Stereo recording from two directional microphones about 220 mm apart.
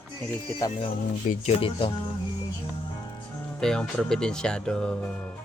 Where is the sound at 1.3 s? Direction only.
25° left (ahead or behind).